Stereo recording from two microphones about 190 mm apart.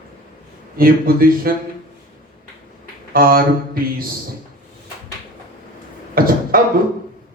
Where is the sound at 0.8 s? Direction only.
50° right (ahead or behind).